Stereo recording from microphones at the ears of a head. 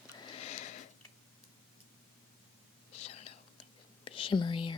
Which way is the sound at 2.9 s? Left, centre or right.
Left.